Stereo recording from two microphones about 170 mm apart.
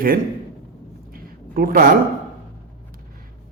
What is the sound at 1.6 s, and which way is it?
Speech, 60° right (ahead or behind).